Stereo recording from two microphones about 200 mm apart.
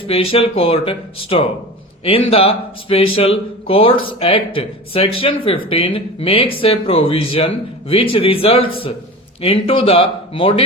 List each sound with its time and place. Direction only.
0.1 s speech: 30° left (ahead or behind)